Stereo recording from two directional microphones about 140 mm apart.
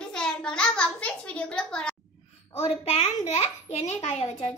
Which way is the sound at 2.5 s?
50° left (ahead or behind).